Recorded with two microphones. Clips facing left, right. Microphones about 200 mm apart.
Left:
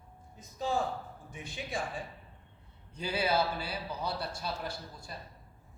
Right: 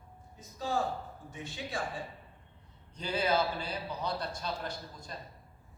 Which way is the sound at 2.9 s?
10° left (ahead or behind).